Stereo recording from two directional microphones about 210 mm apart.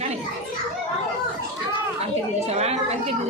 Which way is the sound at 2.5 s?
30° right (ahead or behind).